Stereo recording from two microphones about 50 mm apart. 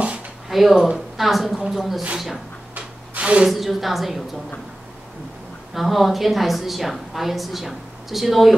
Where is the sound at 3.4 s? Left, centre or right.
Centre.